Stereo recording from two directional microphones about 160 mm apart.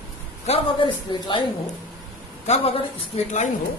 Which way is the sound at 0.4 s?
35° left (ahead or behind).